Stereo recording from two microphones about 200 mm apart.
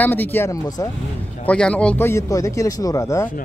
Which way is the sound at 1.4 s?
5° left (ahead or behind).